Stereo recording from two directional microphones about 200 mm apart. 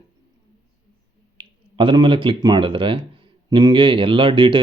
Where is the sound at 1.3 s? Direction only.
25° right (ahead or behind).